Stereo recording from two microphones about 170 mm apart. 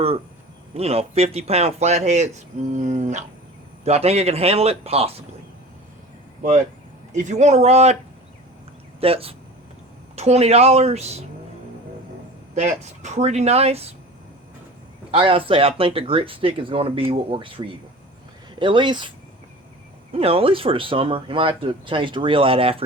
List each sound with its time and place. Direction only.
0.7 s speech: 35° right (ahead or behind)
7.1 s speech: 45° right (ahead or behind)
9.0 s speech: 35° right (ahead or behind)
12.5 s speech: 40° right (ahead or behind)
15.1 s speech: 30° right (ahead or behind)
20.1 s speech: 35° right (ahead or behind)